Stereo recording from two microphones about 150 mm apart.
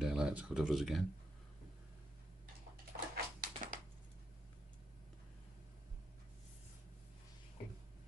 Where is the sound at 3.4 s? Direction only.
65° right (ahead or behind).